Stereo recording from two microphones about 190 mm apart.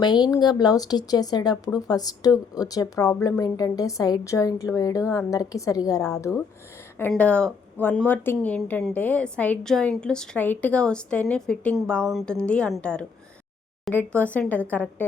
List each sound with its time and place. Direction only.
0.0 s a woman's voice: 20° left (ahead or behind)
7.1 s a woman's voice: 5° left (ahead or behind)